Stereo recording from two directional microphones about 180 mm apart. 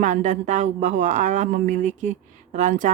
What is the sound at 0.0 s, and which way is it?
Speech, 40° right (ahead or behind).